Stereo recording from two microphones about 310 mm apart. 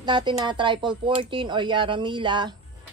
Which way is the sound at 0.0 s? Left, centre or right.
Centre.